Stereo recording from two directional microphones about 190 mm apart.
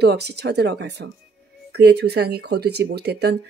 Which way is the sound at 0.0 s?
60° right (ahead or behind).